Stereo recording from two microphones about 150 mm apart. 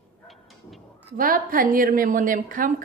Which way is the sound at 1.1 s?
70° right (ahead or behind).